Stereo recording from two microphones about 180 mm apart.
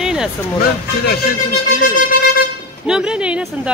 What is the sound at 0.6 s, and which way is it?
Speech, 60° left (ahead or behind).